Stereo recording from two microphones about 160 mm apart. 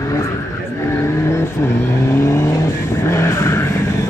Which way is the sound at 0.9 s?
15° left (ahead or behind).